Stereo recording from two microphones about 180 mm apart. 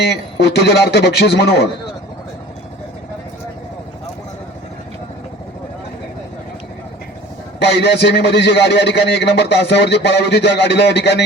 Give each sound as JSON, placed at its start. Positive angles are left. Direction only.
{"t": 0.0, "sound": "a man's voice", "side_deg": 70}
{"t": 7.6, "sound": "a man's voice", "side_deg": 70}